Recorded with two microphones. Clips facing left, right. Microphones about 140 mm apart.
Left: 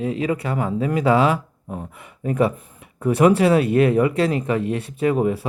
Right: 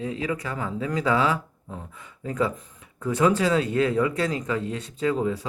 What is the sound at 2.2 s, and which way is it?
Speech, 65° left (ahead or behind).